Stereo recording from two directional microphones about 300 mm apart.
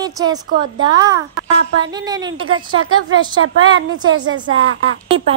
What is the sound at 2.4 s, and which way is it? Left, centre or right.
Speech, right.